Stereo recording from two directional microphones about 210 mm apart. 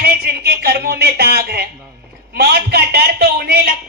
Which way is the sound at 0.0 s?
50° right (ahead or behind).